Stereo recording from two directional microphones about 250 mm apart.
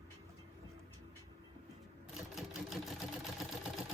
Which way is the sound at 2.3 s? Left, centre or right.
Centre.